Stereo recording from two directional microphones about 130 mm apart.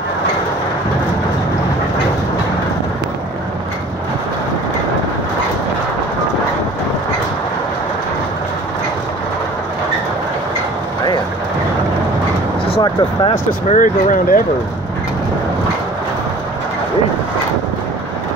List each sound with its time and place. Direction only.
12.8 s speech: 40° left (ahead or behind)
13.7 s speech: 80° left